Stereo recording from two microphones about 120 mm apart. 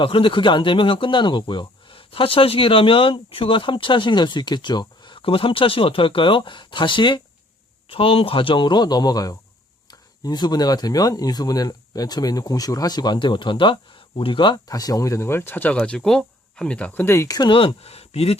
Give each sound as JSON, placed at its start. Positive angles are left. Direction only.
{"t": 0.0, "sound": "speech", "side_deg": 45}